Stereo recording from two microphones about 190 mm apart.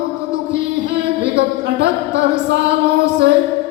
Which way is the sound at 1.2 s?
60° right (ahead or behind).